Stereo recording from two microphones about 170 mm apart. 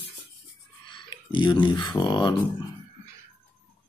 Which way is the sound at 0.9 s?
30° left (ahead or behind).